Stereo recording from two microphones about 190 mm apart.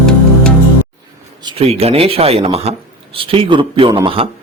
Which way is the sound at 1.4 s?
30° right (ahead or behind).